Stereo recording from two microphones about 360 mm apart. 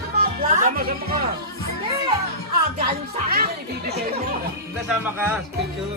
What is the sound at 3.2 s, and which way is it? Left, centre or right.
Music, right.